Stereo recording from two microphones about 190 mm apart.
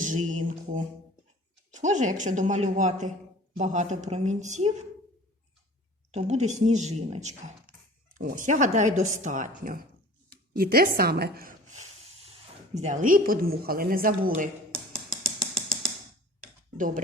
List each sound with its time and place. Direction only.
0.0 s a woman's voice: 40° right (ahead or behind)
1.8 s speech: 40° right (ahead or behind)
6.1 s a woman's voice: 35° right (ahead or behind)
15.2 s music: centre (ahead or behind)
16.7 s speech: 45° right (ahead or behind)